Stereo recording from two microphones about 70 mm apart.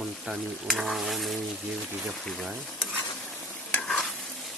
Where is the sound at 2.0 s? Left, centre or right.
Centre.